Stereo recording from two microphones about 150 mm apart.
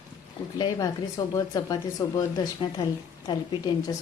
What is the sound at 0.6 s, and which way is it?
A woman's voice, 25° left (ahead or behind).